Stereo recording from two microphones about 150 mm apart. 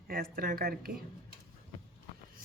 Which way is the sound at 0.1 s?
75° right (ahead or behind).